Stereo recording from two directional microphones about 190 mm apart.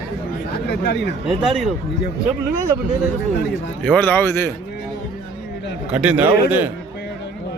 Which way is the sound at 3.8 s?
10° left (ahead or behind).